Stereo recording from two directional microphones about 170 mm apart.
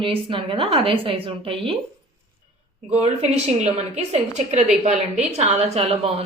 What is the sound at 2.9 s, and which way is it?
A woman's voice, 40° right (ahead or behind).